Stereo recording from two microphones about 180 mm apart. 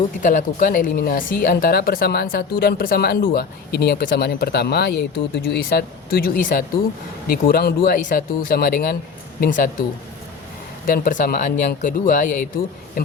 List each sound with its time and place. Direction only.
0.2 s speech: 45° left (ahead or behind)
10.8 s speech: 50° left (ahead or behind)